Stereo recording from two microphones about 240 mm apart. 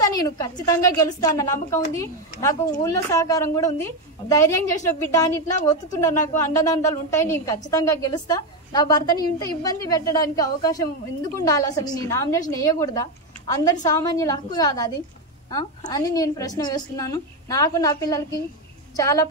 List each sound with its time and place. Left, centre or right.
0.0 s a woman's voice: centre